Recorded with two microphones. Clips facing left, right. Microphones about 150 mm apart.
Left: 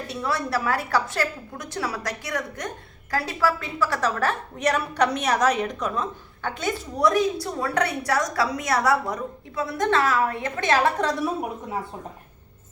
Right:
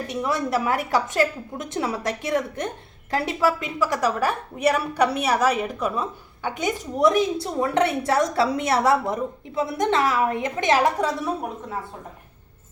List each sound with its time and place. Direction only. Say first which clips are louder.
0.1 s a woman's voice: right 2 dB; 20° right (ahead or behind)